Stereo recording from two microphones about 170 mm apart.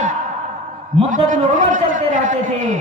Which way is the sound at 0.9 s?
45° right (ahead or behind).